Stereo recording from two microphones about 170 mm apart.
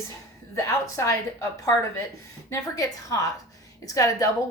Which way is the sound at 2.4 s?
20° left (ahead or behind).